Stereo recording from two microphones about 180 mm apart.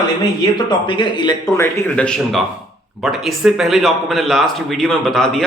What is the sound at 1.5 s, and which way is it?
A man's voice, 10° left (ahead or behind).